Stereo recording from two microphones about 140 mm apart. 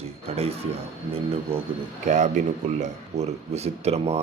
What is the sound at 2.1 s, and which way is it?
A man's voice, 55° right (ahead or behind).